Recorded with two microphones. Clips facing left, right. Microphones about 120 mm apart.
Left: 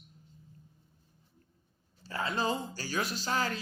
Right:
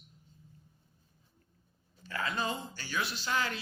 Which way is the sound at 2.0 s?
30° left (ahead or behind).